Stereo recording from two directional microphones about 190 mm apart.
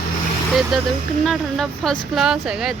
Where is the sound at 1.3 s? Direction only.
Centre (ahead or behind).